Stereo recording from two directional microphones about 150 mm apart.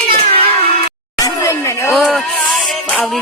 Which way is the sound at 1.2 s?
20° left (ahead or behind).